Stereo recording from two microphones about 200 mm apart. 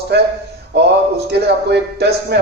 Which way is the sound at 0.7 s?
55° right (ahead or behind).